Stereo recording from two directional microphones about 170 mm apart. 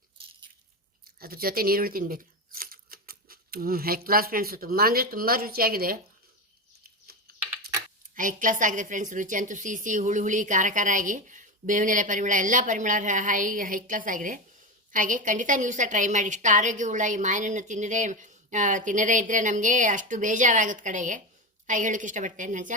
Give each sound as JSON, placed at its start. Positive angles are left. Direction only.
{"t": 1.2, "sound": "speech", "side_deg": -60}
{"t": 7.3, "sound": "typing", "side_deg": -65}
{"t": 8.1, "sound": "a woman's voice", "side_deg": -50}